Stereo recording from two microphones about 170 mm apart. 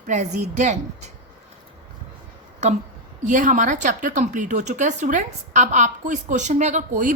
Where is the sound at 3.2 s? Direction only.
50° right (ahead or behind).